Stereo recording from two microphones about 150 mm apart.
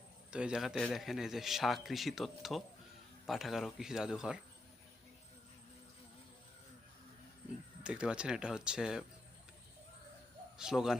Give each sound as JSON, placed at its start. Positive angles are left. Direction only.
{"t": 0.3, "sound": "a man's voice", "side_deg": -5}
{"t": 7.9, "sound": "a man's voice", "side_deg": -5}
{"t": 10.6, "sound": "a man's voice", "side_deg": -5}